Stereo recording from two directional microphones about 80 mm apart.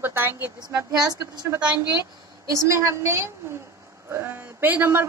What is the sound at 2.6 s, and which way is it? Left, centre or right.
A woman's voice, right.